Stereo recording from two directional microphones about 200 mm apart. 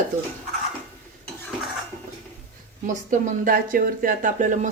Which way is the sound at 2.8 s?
40° right (ahead or behind).